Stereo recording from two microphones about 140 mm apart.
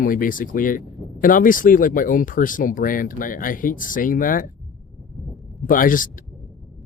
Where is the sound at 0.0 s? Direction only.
80° left.